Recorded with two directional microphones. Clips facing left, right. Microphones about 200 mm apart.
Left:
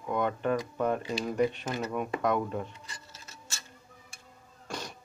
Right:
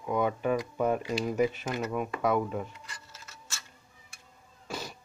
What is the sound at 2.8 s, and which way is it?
Tick-tock, 25° left (ahead or behind).